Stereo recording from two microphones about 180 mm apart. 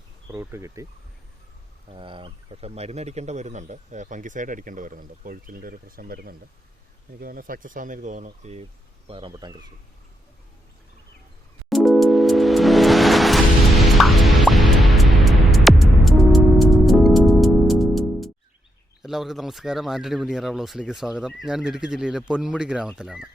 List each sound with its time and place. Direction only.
0.3 s speech: 15° right (ahead or behind)
1.9 s speech: 30° right (ahead or behind)
9.0 s speech: 30° right (ahead or behind)
11.7 s music: centre (ahead or behind)
19.0 s speech: centre (ahead or behind)